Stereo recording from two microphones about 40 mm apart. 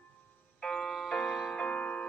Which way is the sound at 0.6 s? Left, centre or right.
Centre.